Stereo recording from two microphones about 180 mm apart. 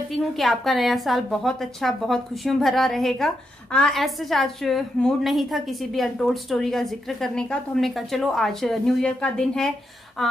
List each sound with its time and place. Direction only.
0.2 s a woman's voice: centre (ahead or behind)